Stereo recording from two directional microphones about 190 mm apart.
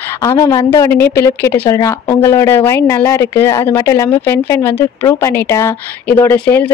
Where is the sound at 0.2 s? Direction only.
20° left (ahead or behind).